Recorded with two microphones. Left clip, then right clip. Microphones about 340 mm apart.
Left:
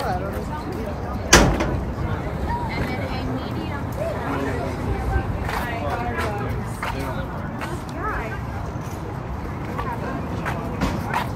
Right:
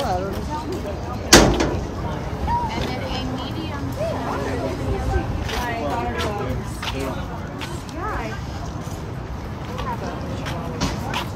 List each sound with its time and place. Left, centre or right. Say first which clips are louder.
1.3 s door: right 2 dB; right